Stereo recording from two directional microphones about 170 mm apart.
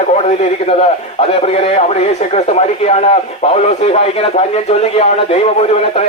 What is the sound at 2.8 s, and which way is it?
A man's voice, 40° left (ahead or behind).